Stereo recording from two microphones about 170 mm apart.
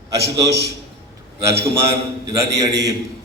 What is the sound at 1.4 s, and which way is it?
A man's voice, 15° right (ahead or behind).